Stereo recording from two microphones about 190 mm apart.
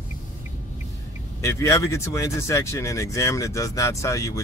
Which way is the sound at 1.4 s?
15° left (ahead or behind).